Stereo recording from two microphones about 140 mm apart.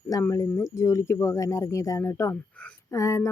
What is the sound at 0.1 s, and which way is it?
Speech, 25° left (ahead or behind).